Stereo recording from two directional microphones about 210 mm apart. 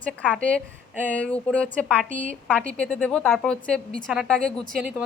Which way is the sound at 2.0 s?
35° right (ahead or behind).